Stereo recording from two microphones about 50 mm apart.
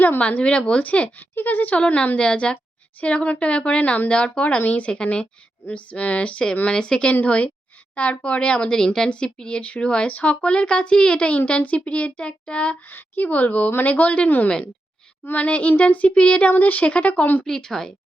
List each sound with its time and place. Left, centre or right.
0.2 s speech: left
1.2 s speech: left
1.7 s speech: left
4.6 s speech: left
5.7 s a woman's voice: left
7.1 s speech: left
12.9 s speech: left
17.4 s a woman's voice: centre